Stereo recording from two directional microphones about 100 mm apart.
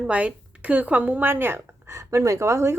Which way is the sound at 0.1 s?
10° right (ahead or behind).